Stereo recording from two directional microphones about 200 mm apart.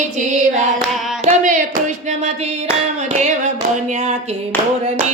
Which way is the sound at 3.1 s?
35° right (ahead or behind).